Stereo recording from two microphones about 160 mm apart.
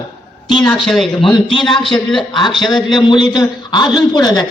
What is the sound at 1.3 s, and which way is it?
Speech, 30° left (ahead or behind).